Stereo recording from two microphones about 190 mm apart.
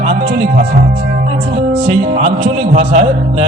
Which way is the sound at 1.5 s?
40° right (ahead or behind).